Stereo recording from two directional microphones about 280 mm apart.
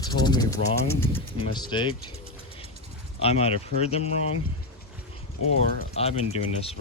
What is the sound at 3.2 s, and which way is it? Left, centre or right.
Speech, left.